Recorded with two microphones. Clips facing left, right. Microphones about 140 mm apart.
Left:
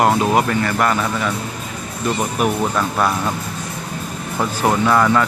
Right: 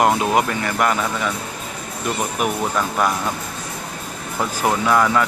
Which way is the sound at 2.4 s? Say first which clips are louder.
Left 3 dB; 5° right (ahead or behind).